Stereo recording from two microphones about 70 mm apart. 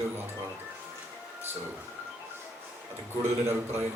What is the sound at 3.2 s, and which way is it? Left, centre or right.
Speech, right.